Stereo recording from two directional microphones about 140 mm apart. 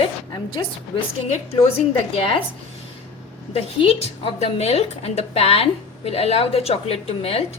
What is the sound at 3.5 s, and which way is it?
A woman's voice, 45° left (ahead or behind).